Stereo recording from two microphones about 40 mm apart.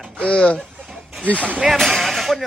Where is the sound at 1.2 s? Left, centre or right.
Left.